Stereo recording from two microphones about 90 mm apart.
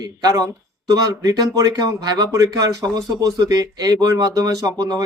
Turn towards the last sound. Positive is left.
turn(degrees=-40)  # may be behind; listen again after turning